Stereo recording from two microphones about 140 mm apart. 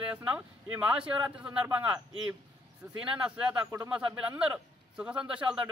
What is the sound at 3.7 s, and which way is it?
Speech, 20° right (ahead or behind).